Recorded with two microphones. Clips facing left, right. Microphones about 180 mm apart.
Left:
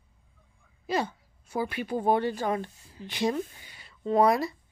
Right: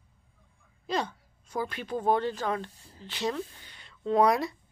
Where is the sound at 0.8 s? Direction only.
5° left (ahead or behind).